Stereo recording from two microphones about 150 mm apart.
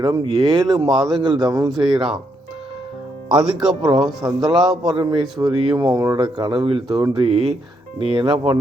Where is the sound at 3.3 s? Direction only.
5° right (ahead or behind).